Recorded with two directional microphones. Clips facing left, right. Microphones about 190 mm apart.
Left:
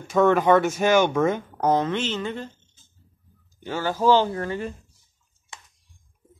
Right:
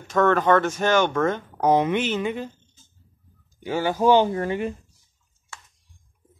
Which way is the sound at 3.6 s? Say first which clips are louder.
Right 1 dB; 15° right (ahead or behind).